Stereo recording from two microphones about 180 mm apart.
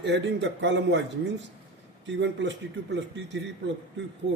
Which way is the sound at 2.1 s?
80° right.